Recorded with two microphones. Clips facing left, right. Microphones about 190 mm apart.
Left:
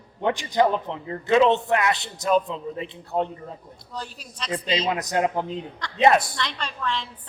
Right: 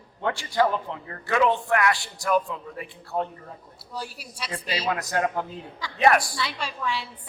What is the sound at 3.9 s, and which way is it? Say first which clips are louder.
Speech: even; 10° right (ahead or behind).